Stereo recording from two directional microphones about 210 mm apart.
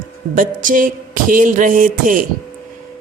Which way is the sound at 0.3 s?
40° right (ahead or behind).